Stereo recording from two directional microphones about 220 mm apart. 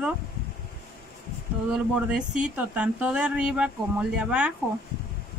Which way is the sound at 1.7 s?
5° right (ahead or behind).